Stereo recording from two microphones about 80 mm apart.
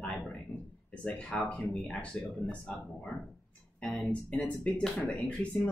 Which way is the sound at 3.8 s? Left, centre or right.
Centre.